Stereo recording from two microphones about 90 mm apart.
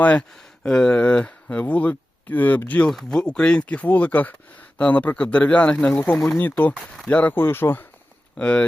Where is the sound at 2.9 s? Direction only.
5° left (ahead or behind); by 7.8 s 25° left (ahead or behind).